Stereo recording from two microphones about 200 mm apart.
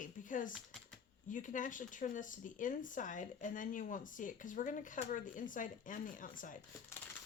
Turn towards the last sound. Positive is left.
turn(degrees=40)  # may be behind; listen again after turning